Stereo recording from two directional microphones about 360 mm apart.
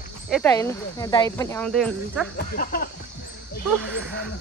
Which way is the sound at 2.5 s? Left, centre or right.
Left.